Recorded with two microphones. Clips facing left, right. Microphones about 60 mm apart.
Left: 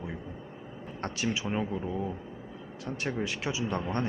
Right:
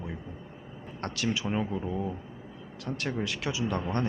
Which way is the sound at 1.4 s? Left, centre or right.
Centre.